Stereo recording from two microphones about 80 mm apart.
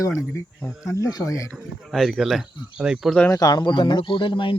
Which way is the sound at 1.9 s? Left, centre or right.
Centre.